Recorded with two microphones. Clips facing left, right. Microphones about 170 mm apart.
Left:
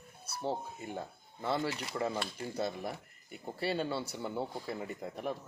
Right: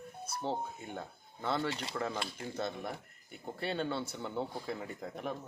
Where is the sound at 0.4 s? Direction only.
5° left (ahead or behind).